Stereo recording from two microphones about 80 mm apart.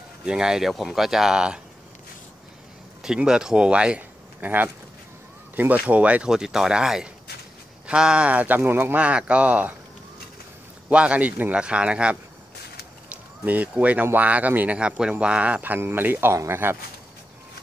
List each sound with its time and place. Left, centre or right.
0.2 s speech: centre
3.0 s speech: centre
5.6 s speech: centre
10.9 s speech: centre